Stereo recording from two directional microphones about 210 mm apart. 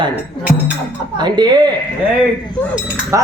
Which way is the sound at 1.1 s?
20° right (ahead or behind).